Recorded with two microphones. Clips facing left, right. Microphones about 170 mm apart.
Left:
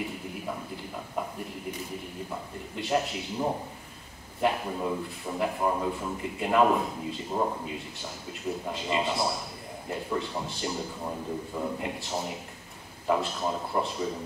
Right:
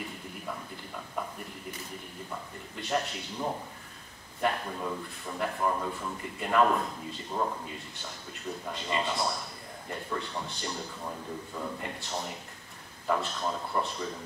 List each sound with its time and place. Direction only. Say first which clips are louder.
2.8 s a man's voice: left 4 dB; 5° left (ahead or behind)
8.5 s a man's voice: left 4 dB; 10° left (ahead or behind)
11.1 s a man's voice: left 5 dB; 15° left (ahead or behind)
12.1 s a man's voice: left 3 dB; 5° left (ahead or behind)